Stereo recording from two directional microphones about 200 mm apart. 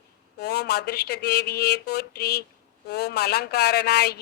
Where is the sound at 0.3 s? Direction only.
55° left (ahead or behind).